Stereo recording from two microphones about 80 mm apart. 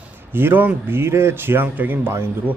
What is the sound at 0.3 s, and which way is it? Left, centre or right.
Speech, right.